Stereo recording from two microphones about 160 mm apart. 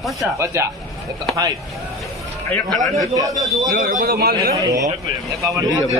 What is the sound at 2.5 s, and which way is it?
Speech, centre (ahead or behind).